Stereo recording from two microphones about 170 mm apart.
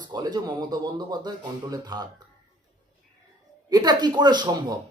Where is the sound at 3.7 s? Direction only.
25° right (ahead or behind).